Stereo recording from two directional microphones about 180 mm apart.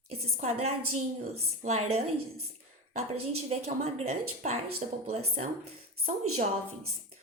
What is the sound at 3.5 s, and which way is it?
Speech, 35° right (ahead or behind).